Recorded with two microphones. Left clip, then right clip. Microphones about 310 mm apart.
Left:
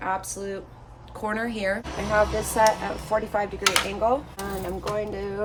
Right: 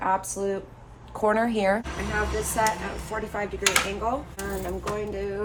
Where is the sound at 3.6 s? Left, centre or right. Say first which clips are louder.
Left 1 dB; centre.